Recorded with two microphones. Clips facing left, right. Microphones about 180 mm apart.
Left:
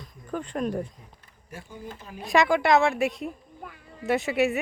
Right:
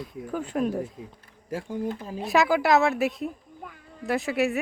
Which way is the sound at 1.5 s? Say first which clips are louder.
Right 11 dB; 85° right.